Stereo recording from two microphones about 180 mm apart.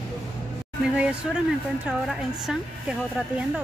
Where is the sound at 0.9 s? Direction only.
5° right (ahead or behind).